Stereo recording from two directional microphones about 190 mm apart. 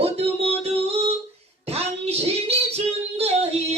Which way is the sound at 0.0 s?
30° right (ahead or behind).